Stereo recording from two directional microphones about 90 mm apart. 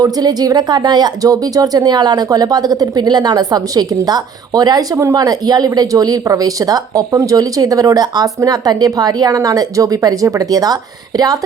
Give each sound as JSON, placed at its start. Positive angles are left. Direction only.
{"t": 0.0, "sound": "speech", "side_deg": -45}